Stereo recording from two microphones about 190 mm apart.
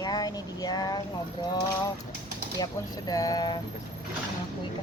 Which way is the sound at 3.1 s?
20° left (ahead or behind).